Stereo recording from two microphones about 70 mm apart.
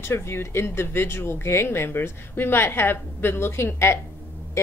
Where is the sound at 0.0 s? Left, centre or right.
Left.